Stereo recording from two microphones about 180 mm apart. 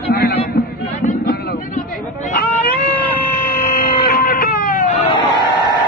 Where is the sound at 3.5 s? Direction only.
55° left (ahead or behind).